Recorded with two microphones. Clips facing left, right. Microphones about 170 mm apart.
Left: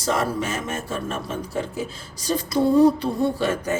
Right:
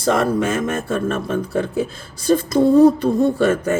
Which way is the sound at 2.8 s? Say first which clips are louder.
Right 5 dB; 50° right (ahead or behind).